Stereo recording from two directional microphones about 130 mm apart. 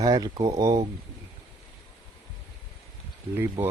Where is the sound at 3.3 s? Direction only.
20° right (ahead or behind).